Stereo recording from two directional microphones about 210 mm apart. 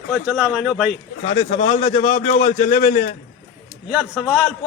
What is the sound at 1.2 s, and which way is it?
A man's voice, 25° left (ahead or behind).